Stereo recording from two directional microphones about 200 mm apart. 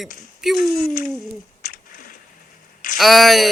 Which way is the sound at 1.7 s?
45° left (ahead or behind).